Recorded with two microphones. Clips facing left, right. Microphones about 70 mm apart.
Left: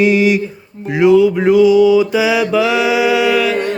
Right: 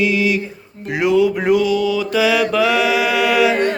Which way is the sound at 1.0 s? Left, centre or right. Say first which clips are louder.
Left 5 dB; centre.